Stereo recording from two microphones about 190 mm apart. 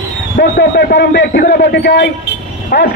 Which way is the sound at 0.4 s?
65° left (ahead or behind).